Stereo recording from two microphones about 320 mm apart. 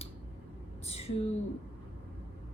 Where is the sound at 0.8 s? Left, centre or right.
Centre.